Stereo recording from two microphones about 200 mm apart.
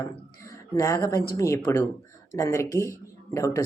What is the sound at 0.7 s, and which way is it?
Speech, 15° left (ahead or behind).